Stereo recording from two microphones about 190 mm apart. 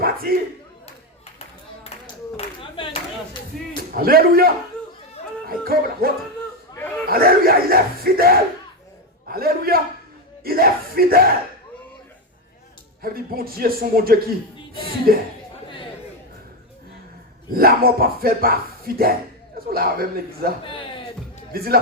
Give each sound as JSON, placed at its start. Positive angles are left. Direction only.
{"t": 0.0, "sound": "battle cry", "side_deg": -50}
{"t": 2.3, "sound": "clapping", "side_deg": 30}
{"t": 3.5, "sound": "a man's voice", "side_deg": 0}
{"t": 3.9, "sound": "speech", "side_deg": -50}
{"t": 5.5, "sound": "speech", "side_deg": -50}
{"t": 6.7, "sound": "wild animals", "side_deg": 10}
{"t": 7.1, "sound": "speech", "side_deg": -50}
{"t": 13.0, "sound": "speech", "side_deg": -50}
{"t": 15.6, "sound": "chatter", "side_deg": 25}
{"t": 17.5, "sound": "speech", "side_deg": -50}
{"t": 21.5, "sound": "speech", "side_deg": -50}